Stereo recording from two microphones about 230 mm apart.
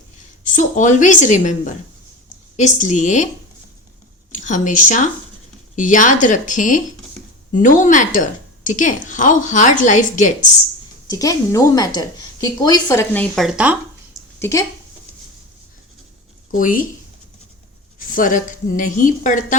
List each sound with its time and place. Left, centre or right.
0.4 s a woman's voice: left
4.4 s a woman's voice: left
11.1 s a woman's voice: centre
13.3 s speech: centre
14.3 s speech: centre
16.5 s speech: left
18.1 s a woman's voice: left